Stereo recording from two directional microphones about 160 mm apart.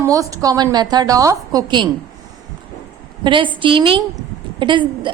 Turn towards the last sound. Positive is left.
turn(degrees=-30)  # may be behind; listen again after turning